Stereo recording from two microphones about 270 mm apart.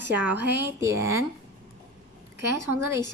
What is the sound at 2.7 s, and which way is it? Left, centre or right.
Speech, right.